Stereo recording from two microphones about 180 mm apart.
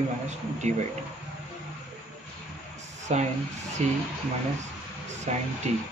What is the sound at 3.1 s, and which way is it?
Speech, 40° right (ahead or behind).